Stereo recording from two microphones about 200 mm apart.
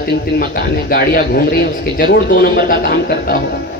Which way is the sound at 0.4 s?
45° left (ahead or behind).